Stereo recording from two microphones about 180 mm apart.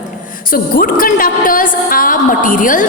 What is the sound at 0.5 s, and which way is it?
A woman's voice, 50° left (ahead or behind).